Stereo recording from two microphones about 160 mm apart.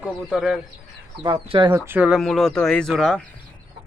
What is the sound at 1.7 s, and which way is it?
Speech, 10° right (ahead or behind).